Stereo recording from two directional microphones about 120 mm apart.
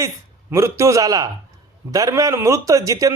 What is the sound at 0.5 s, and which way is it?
A man's voice, 25° right (ahead or behind).